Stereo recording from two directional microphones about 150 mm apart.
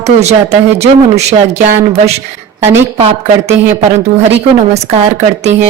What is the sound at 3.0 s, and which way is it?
A woman's voice, 40° right (ahead or behind).